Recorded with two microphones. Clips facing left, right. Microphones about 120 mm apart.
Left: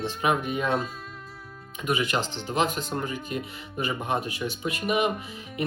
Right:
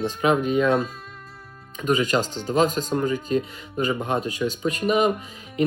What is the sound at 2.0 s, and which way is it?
Speech, 45° right (ahead or behind).